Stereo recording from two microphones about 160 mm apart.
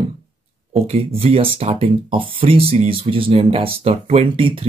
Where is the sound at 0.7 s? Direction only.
35° right (ahead or behind).